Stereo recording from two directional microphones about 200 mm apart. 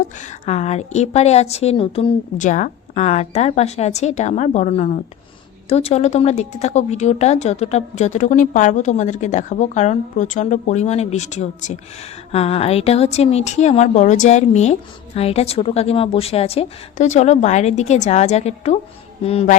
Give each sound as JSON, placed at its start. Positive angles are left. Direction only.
{"t": 0.2, "sound": "speech", "side_deg": 35}